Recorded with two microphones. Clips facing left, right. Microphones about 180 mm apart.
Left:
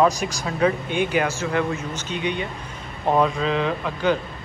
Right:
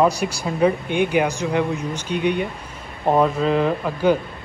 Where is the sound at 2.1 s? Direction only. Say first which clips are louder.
Right 6 dB; 55° right (ahead or behind).